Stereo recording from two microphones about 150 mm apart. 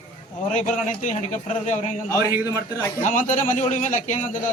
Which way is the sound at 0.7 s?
55° left (ahead or behind).